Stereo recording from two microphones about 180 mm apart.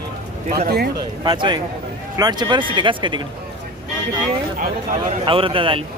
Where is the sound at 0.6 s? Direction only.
60° right (ahead or behind).